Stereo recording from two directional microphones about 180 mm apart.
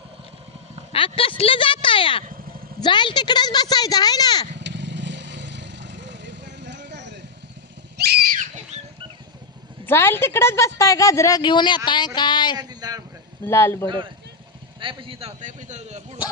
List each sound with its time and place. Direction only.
0.9 s speech: 30° left (ahead or behind)
4.5 s vehicle: 80° right
7.9 s a sound: 50° right (ahead or behind)
9.8 s a woman's voice: 15° left (ahead or behind)
12.5 s speech: 20° right (ahead or behind)
13.4 s a woman's voice: 15° left (ahead or behind)
13.8 s a man's voice: 25° right (ahead or behind)